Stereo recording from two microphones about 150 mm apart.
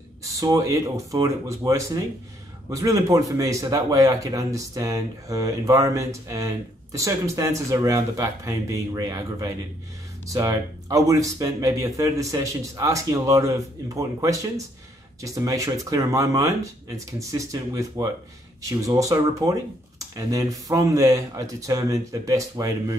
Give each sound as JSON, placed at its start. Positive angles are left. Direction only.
{"t": 0.2, "sound": "speech", "side_deg": -20}